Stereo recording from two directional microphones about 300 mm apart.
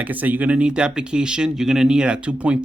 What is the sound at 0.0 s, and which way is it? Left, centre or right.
Speech, centre.